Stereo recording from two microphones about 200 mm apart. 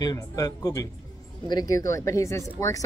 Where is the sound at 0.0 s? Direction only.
20° left (ahead or behind).